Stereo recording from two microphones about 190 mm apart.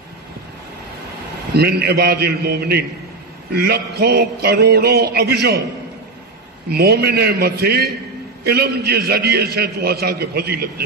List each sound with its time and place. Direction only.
1.5 s a man's voice: 55° right (ahead or behind)
6.7 s a man's voice: 55° right (ahead or behind)